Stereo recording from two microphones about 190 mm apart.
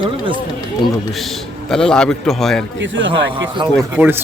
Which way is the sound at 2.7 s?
75° right (ahead or behind).